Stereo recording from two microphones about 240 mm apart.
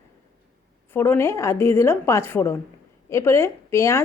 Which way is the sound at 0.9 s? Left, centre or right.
Centre.